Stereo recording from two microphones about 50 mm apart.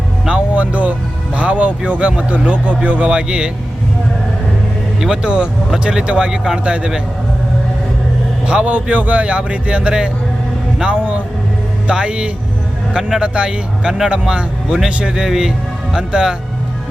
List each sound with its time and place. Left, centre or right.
0.5 s a man's voice: right
3.1 s a man's voice: centre
5.1 s a man's voice: centre
8.4 s a man's voice: right
10.8 s vehicle: right
11.9 s a man's voice: right